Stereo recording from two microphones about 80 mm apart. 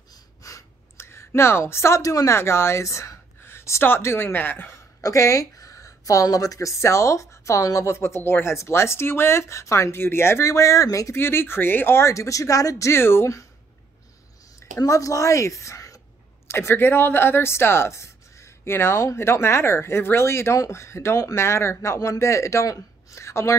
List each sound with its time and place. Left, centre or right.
0.1 s a sound: left
2.3 s speech: left
5.0 s speech: left
11.1 s speech: left
14.8 s a woman's voice: left
16.4 s speech: left